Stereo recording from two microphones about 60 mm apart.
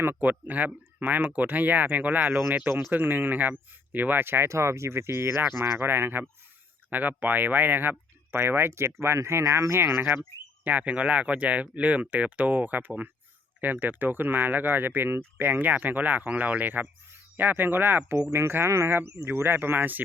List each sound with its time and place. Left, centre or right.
0.0 s speech: right
18.2 s speech: right